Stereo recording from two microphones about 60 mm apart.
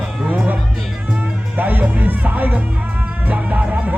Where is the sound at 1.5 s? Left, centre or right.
Right.